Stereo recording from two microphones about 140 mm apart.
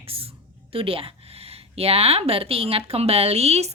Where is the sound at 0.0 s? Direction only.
40° right (ahead or behind).